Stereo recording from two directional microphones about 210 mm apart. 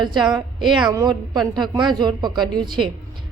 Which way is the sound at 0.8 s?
20° right (ahead or behind).